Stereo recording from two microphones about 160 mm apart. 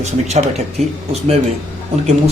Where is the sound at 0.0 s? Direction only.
45° right (ahead or behind).